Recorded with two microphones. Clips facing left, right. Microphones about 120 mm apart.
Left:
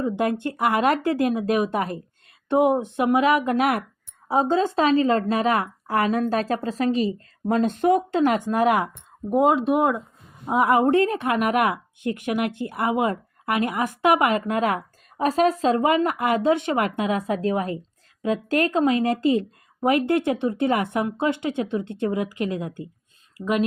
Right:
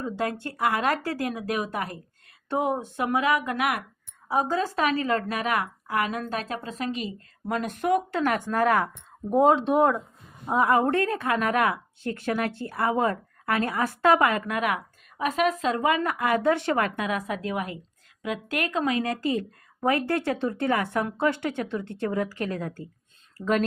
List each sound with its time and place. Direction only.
0.0 s speech: 20° left (ahead or behind)
9.3 s speech: 5° left (ahead or behind)
10.4 s speech: 20° left (ahead or behind)
23.4 s speech: 10° left (ahead or behind)